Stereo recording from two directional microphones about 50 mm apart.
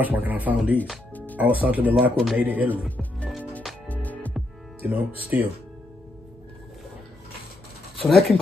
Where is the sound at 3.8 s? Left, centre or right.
Left.